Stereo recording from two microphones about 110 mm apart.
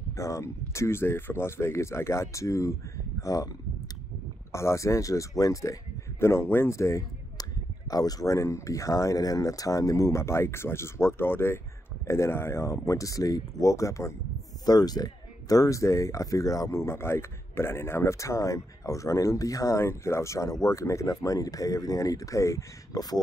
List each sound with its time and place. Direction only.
0.1 s speech: 30° left (ahead or behind)
4.5 s a man's voice: 25° left (ahead or behind)